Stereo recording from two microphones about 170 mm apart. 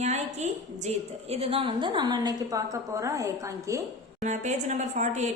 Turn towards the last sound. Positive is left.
turn(degrees=-45)  # may be behind; listen again after turning